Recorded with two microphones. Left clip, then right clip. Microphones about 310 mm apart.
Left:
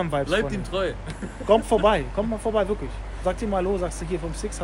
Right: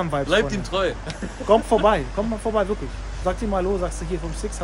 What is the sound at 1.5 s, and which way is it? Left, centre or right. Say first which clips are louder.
Speech: right 2 dB; centre.